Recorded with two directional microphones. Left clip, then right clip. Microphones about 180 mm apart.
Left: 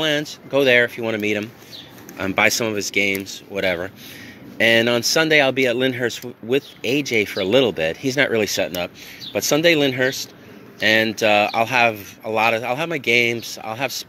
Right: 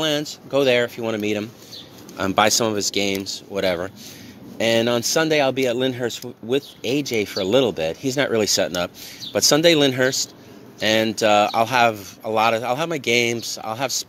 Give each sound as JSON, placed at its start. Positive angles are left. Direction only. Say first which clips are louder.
{"t": 0.0, "sound": "speech", "louder": "left 1 dB", "side_deg": 0}
{"t": 2.1, "sound": "speech", "louder": "even", "side_deg": -15}
{"t": 4.6, "sound": "speech", "louder": "left 3 dB", "side_deg": 0}
{"t": 8.4, "sound": "speech", "louder": "right 1 dB", "side_deg": -15}